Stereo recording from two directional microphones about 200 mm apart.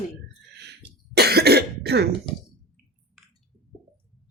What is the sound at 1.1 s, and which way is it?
Cough, 55° right (ahead or behind).